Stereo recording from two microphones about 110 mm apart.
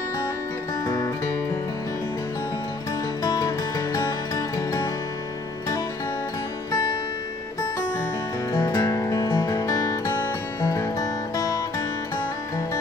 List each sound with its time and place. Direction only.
0.8 s music: 30° left (ahead or behind)
3.3 s music: 30° left (ahead or behind)
8.5 s music: 35° left (ahead or behind)